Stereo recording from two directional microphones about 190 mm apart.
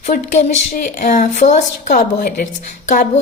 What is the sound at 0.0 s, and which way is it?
A woman's voice, 40° left (ahead or behind).